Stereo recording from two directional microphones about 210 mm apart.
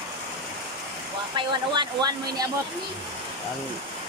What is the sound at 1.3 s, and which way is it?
Speech, 20° right (ahead or behind).